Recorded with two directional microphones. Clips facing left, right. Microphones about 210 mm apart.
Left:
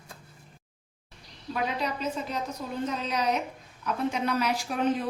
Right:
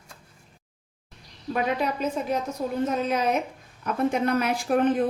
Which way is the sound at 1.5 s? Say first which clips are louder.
Right 5 dB; 55° right (ahead or behind).